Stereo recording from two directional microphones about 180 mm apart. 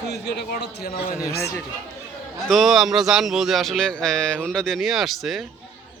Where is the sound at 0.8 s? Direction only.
60° left (ahead or behind).